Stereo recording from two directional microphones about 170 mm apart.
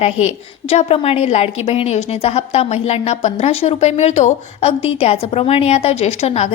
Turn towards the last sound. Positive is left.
turn(degrees=40)  # may be behind; listen again after turning